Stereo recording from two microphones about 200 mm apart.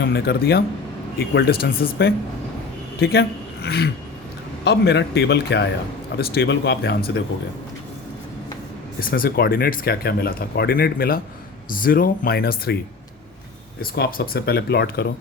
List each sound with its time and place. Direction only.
0.0 s a man's voice: 55° left (ahead or behind)
9.0 s speech: 45° left (ahead or behind)
13.9 s speech: 50° left (ahead or behind)